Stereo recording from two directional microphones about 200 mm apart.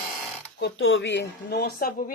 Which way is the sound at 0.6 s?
70° left (ahead or behind).